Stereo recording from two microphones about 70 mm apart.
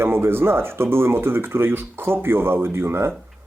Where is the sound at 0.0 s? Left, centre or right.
Right.